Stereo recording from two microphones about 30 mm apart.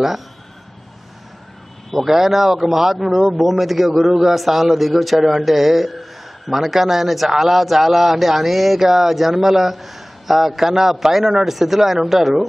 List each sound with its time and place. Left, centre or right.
1.9 s a man's voice: centre